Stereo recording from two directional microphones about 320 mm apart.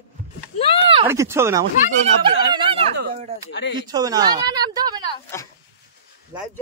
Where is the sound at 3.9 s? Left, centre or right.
Centre.